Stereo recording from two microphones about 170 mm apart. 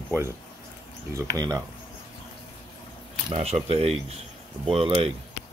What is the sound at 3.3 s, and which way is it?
Speech, 40° right (ahead or behind).